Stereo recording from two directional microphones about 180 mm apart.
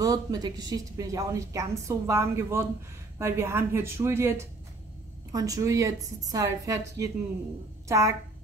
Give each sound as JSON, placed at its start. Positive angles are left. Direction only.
{"t": 0.0, "sound": "a woman's voice", "side_deg": -20}